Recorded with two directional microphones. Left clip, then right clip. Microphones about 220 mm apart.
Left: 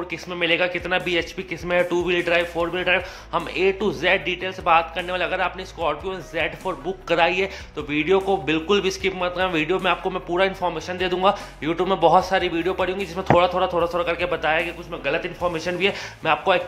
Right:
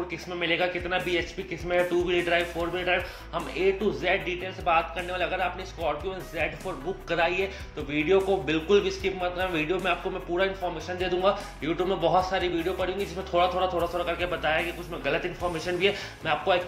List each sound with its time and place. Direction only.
0.4 s a man's voice: 25° left (ahead or behind)